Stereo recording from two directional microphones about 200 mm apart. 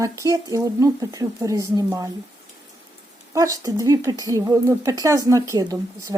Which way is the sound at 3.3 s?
15° right (ahead or behind).